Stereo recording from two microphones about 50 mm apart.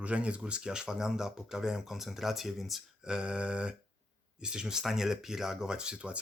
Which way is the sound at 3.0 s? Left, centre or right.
Centre.